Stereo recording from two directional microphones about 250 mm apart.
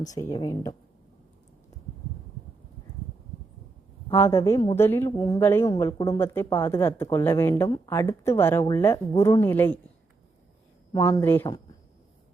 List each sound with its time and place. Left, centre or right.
0.1 s a woman's voice: centre
4.1 s a woman's voice: centre
10.9 s a woman's voice: centre